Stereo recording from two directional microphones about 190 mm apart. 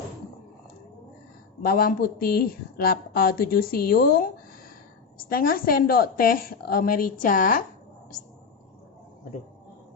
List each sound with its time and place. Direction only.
1.6 s a woman's voice: 50° left (ahead or behind)